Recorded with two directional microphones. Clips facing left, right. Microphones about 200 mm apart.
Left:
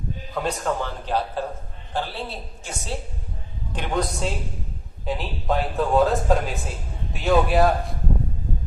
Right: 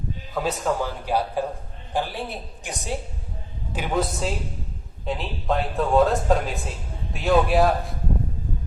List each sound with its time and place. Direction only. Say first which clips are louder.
0.3 s speech: right 1 dB; 5° right (ahead or behind)
3.7 s speech: right 1 dB; 5° right (ahead or behind)